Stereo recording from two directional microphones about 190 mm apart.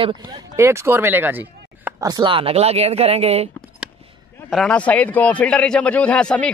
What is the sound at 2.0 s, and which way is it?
Speech, 25° right (ahead or behind).